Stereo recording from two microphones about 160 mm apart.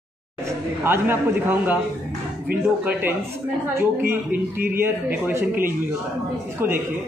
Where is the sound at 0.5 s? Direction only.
15° right (ahead or behind).